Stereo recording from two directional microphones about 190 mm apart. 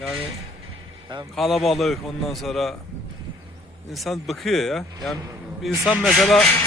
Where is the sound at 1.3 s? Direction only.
Centre (ahead or behind).